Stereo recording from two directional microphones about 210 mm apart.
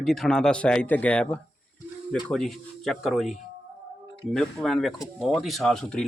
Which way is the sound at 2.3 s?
Centre (ahead or behind).